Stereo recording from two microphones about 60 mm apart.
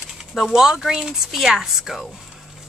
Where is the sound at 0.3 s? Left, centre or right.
Centre.